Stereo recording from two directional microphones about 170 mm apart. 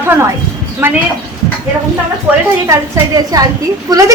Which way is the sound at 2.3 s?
5° right (ahead or behind).